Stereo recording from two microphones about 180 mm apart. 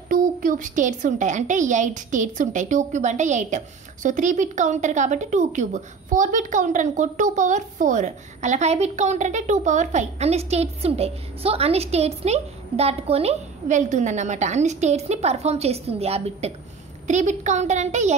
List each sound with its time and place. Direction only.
0.1 s a woman's voice: 50° right (ahead or behind)